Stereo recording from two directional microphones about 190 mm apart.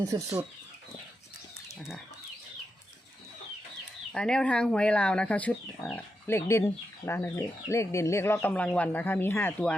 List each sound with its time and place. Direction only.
0.0 s speech: 15° right (ahead or behind)
4.1 s speech: 5° left (ahead or behind)